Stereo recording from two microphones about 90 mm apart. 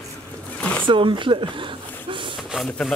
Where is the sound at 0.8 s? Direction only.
70° right (ahead or behind).